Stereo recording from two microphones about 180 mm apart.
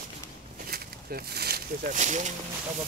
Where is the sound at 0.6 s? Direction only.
60° right (ahead or behind).